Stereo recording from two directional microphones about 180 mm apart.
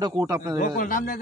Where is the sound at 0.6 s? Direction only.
50° left (ahead or behind).